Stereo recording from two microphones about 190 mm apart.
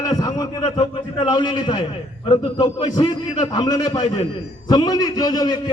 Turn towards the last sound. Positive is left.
turn(degrees=20)  # may be behind; listen again after turning